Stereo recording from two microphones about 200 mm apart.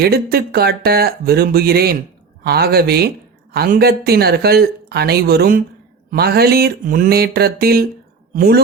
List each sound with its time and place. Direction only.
0.0 s a woman's voice: 50° right (ahead or behind)